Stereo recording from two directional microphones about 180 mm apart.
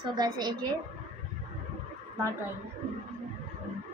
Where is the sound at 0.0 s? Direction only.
25° right (ahead or behind).